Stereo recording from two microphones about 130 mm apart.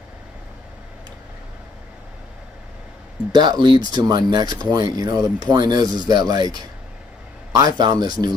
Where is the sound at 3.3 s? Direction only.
35° right (ahead or behind).